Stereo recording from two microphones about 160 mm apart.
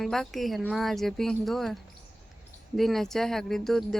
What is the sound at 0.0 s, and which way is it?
Speech, centre (ahead or behind).